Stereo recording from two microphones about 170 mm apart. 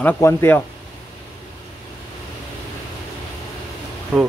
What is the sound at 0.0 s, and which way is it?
Speech, 10° left (ahead or behind).